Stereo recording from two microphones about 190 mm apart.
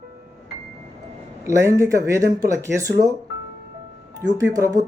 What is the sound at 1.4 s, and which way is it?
Speech, 15° right (ahead or behind).